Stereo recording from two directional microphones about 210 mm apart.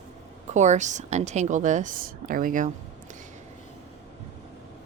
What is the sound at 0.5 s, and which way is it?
A woman's voice, 35° right (ahead or behind).